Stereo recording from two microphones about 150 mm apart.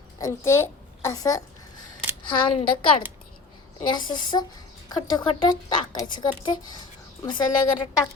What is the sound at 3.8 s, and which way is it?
Speech, 30° left (ahead or behind).